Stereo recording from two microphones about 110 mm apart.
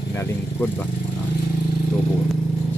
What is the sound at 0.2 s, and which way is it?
Vehicle, 20° left (ahead or behind).